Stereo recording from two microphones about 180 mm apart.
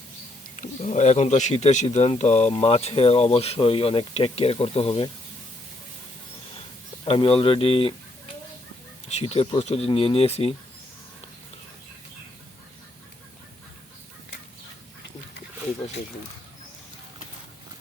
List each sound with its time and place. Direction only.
0.5 s speech: 40° left (ahead or behind)
7.0 s speech: 30° left (ahead or behind)
9.1 s speech: 35° left (ahead or behind)